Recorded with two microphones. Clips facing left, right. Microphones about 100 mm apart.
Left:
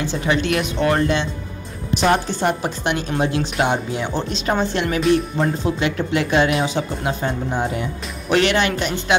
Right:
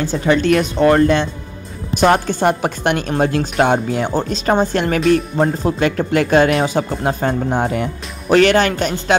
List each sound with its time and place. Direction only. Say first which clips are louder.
0.0 s speech: right 5 dB; 40° right (ahead or behind); by 7.9 s 55° right (ahead or behind)
8.3 s speech: right 5 dB; 40° right (ahead or behind)